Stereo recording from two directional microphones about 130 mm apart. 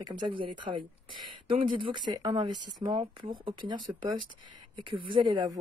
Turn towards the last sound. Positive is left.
turn(degrees=-35)  # may be behind; listen again after turning